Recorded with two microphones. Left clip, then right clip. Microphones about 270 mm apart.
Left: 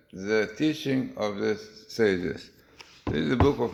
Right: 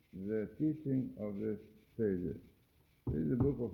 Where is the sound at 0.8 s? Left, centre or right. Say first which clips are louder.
Left 11 dB; left.